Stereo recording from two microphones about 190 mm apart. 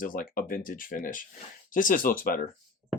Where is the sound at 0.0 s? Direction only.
45° left (ahead or behind).